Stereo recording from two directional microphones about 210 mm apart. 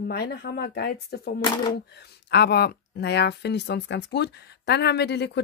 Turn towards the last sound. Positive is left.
turn(degrees=55)  # may be behind; listen again after turning